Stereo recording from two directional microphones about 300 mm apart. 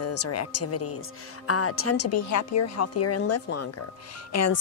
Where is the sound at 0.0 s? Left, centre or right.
Left.